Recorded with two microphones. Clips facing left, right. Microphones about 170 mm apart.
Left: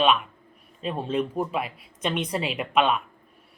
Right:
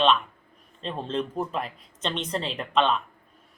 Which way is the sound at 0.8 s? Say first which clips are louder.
Left 3 dB; 10° left (ahead or behind).